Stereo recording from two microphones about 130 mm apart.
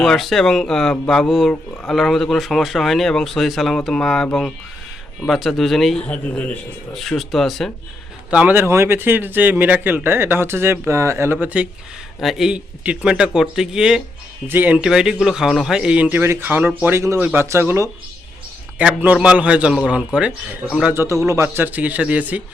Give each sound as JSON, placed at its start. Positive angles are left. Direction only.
{"t": 0.0, "sound": "speech", "side_deg": 0}
{"t": 8.3, "sound": "speech", "side_deg": -10}
{"t": 20.9, "sound": "speech", "side_deg": -20}